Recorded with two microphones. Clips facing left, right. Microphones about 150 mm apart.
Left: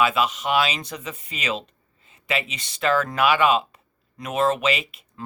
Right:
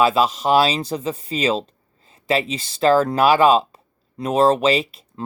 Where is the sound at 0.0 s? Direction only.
35° right (ahead or behind).